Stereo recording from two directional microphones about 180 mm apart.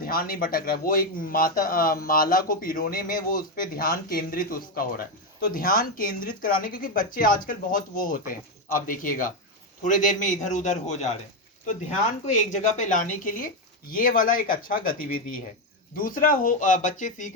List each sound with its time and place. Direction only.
0.0 s a man's voice: 50° left (ahead or behind)
12.7 s speech: 45° left (ahead or behind)